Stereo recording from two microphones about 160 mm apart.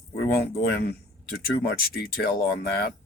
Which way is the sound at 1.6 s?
75° left (ahead or behind).